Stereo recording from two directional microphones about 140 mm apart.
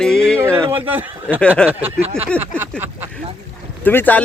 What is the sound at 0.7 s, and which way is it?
Speech, 15° right (ahead or behind).